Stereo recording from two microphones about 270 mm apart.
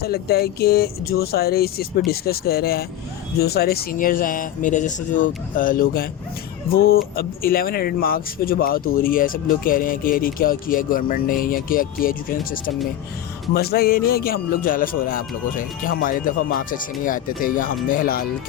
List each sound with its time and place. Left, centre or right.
0.0 s speech: left